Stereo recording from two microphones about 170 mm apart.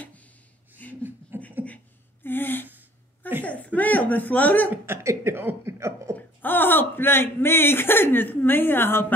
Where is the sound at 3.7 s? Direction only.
10° left (ahead or behind).